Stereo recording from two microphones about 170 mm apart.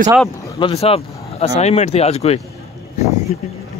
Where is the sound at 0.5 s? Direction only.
30° left (ahead or behind).